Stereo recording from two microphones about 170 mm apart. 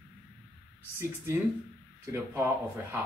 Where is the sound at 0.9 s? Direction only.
15° right (ahead or behind).